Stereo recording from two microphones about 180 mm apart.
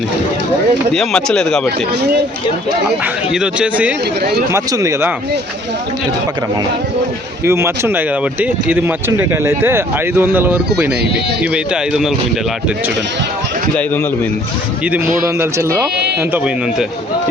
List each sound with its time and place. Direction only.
0.9 s speech: 5° left (ahead or behind)
3.0 s speech: 5° right (ahead or behind)
4.5 s speech: 20° right (ahead or behind)
7.4 s speech: 15° right (ahead or behind)
14.8 s speech: 10° right (ahead or behind)